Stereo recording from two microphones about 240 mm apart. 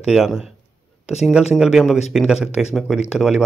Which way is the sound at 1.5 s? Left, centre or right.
Centre.